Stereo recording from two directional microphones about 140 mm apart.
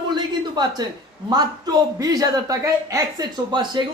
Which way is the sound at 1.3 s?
30° right (ahead or behind).